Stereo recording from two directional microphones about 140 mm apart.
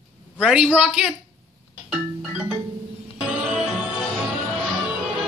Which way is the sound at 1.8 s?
5° right (ahead or behind).